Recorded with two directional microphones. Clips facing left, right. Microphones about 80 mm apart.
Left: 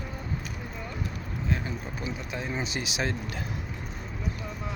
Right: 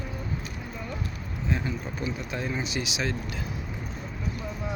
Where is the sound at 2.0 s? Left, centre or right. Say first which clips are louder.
Right 3 dB; centre.